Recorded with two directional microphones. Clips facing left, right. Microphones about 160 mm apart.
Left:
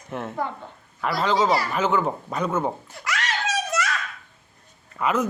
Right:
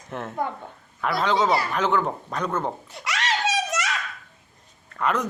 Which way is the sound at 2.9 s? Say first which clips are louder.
Right 1 dB; 20° right (ahead or behind).